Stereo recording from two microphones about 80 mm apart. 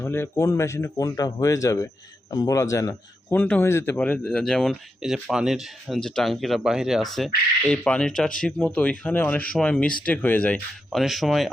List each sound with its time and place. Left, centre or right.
0.0 s a man's voice: left
3.3 s speech: centre
3.6 s speech: left
3.9 s speech: centre
4.2 s speech: centre
4.7 s speech: centre
6.0 s speech: centre
7.7 s speech: centre
10.9 s speech: centre